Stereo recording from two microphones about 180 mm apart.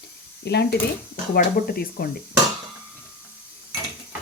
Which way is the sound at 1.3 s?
55° left (ahead or behind).